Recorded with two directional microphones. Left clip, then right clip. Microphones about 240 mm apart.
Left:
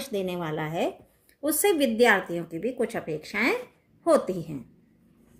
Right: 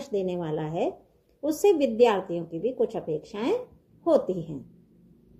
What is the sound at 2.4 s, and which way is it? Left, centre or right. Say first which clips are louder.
Speech: right 2 dB; left.